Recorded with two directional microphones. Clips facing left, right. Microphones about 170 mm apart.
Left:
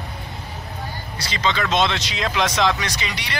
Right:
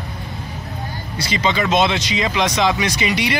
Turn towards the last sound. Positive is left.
turn(degrees=-10)  # may be behind; listen again after turning